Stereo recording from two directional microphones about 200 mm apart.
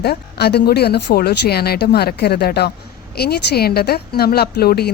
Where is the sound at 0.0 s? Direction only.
55° left (ahead or behind).